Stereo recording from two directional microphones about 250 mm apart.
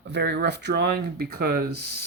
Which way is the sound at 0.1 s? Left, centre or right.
Right.